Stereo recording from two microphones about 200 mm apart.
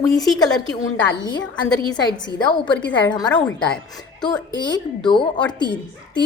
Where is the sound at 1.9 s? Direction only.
20° left (ahead or behind).